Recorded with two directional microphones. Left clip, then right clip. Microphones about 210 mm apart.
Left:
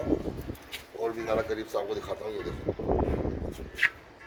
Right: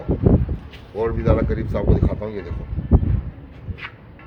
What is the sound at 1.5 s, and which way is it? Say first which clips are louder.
Speech: right 7 dB; centre (ahead or behind).